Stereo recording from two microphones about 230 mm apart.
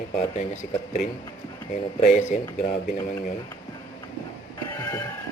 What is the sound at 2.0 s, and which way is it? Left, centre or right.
Speech, left.